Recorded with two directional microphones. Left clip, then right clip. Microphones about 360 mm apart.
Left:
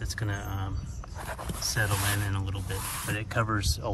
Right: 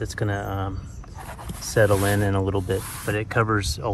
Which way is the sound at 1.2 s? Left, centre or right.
Centre.